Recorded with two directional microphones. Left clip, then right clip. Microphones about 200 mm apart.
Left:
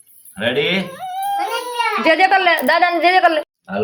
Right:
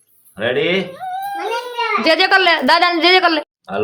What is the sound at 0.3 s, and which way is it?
Speech, 30° right (ahead or behind).